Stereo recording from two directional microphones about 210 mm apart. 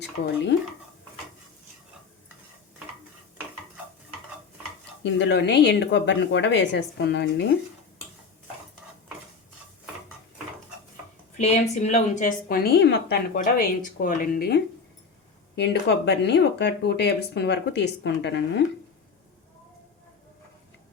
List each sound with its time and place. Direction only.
0.2 s speech: 55° left (ahead or behind)
5.0 s speech: 55° left (ahead or behind)
11.3 s a woman's voice: 35° left (ahead or behind); by 18.6 s 55° left (ahead or behind)